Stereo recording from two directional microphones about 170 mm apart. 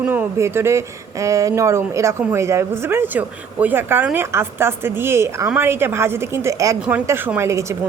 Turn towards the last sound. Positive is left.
turn(degrees=-15)  # may be behind; listen again after turning